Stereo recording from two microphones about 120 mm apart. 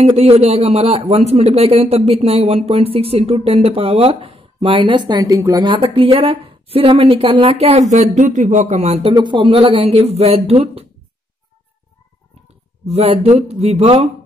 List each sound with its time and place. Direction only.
0.0 s a man's voice: 60° right (ahead or behind); by 5.7 s 30° right (ahead or behind)
5.7 s a woman's voice: 50° right (ahead or behind); by 9.1 s 65° right (ahead or behind)
9.1 s a man's voice: 40° right (ahead or behind)
12.8 s a man's voice: 55° right (ahead or behind)